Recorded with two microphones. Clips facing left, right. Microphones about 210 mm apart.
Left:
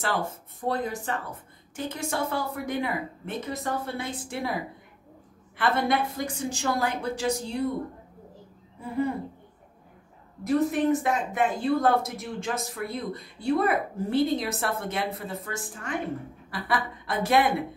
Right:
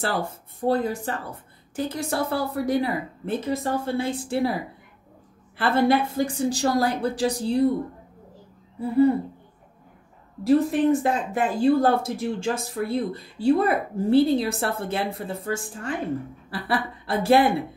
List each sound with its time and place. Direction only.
0.7 s speech: 30° right (ahead or behind)
5.6 s speech: 30° right (ahead or behind)
8.7 s speech: 35° right (ahead or behind)
10.4 s a woman's voice: 30° right (ahead or behind)